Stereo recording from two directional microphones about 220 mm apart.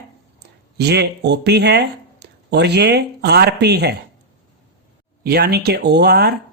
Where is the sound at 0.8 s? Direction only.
50° right (ahead or behind).